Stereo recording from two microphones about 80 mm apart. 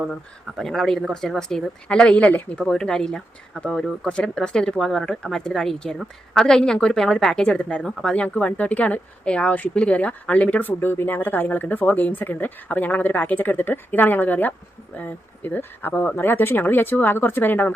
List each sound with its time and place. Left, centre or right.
0.6 s a woman's voice: centre; by 17.7 s left